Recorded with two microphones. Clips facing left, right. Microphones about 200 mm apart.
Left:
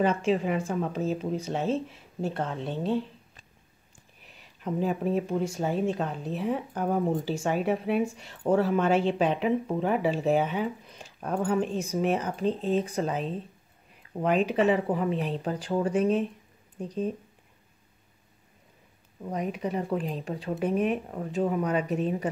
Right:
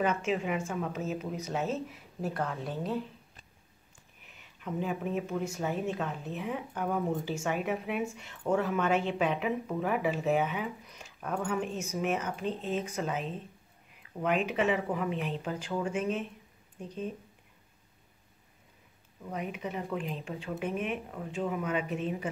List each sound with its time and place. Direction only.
0.0 s speech: 30° left (ahead or behind)
4.2 s speech: 35° left (ahead or behind)
19.2 s speech: 35° left (ahead or behind)